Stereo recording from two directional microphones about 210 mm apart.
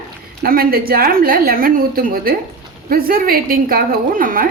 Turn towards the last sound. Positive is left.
turn(degrees=-40)  # may be behind; listen again after turning